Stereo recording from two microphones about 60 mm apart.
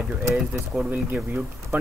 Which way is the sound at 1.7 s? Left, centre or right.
Right.